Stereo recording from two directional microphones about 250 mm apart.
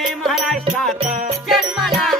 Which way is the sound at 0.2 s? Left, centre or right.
Centre.